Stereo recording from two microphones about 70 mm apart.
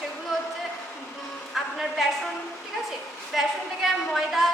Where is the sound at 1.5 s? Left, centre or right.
Centre.